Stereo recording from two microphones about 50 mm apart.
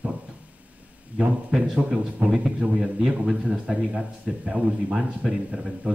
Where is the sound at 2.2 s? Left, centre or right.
Right.